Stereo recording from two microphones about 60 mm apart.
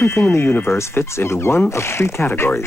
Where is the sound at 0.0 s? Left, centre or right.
Left.